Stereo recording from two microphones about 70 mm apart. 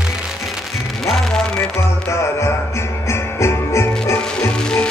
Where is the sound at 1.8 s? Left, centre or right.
Left.